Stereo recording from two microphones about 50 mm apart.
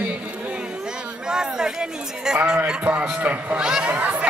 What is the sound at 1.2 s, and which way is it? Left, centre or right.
Speech, centre.